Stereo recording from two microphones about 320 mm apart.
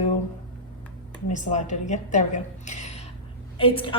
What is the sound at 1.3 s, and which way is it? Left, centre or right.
A woman's voice, left.